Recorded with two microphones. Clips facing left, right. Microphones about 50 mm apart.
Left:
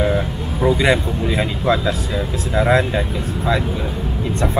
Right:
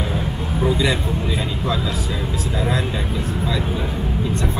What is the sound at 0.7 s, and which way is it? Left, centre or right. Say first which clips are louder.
Speech: left 4 dB; left.